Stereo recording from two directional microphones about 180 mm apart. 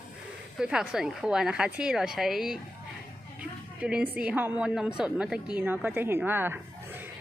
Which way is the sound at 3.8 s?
5° right (ahead or behind).